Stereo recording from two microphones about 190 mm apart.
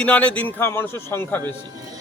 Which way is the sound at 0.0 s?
5° left (ahead or behind).